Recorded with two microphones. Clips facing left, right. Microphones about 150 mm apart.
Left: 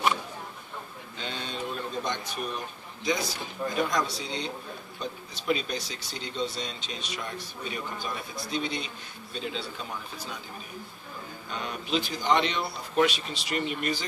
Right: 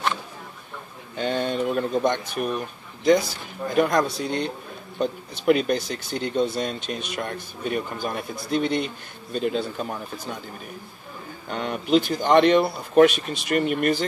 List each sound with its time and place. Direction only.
1.1 s speech: 55° right (ahead or behind)
3.7 s speech: 55° right (ahead or behind)
11.5 s speech: 60° right (ahead or behind)